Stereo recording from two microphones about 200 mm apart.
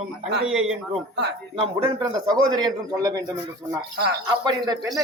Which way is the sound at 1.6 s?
20° right (ahead or behind).